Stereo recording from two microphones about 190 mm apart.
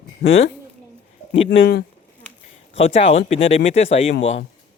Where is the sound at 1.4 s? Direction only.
50° left (ahead or behind).